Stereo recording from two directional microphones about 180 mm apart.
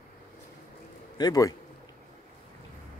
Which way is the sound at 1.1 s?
20° left (ahead or behind).